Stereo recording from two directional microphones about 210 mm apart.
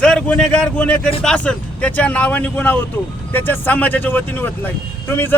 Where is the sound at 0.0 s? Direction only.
5° left (ahead or behind).